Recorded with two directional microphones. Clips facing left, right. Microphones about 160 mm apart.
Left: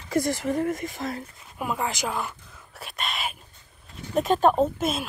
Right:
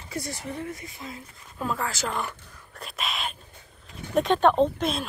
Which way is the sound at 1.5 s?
15° left (ahead or behind).